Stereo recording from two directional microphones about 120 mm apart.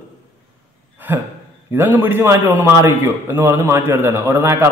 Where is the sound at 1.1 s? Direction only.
20° right (ahead or behind).